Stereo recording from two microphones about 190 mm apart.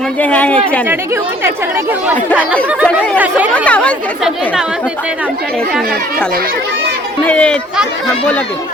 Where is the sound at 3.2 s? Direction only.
10° right (ahead or behind).